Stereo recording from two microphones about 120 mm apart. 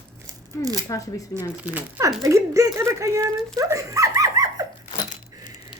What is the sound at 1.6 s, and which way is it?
Speech, 15° right (ahead or behind).